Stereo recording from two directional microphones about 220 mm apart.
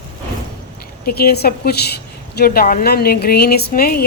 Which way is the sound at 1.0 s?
45° left (ahead or behind).